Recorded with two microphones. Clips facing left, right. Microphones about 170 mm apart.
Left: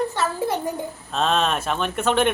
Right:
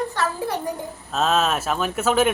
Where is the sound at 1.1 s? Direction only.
5° right (ahead or behind).